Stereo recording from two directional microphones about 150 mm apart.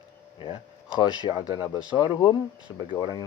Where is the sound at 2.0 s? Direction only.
30° left (ahead or behind).